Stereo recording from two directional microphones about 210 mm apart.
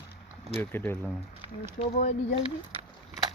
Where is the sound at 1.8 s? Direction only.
35° left (ahead or behind).